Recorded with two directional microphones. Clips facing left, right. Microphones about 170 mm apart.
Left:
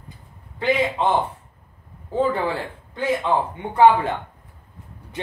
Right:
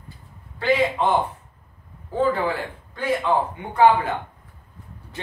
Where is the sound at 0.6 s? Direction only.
20° left (ahead or behind).